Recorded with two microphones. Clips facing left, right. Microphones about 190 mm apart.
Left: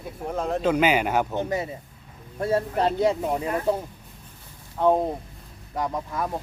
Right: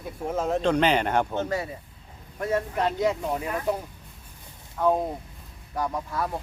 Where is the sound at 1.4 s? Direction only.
20° left (ahead or behind).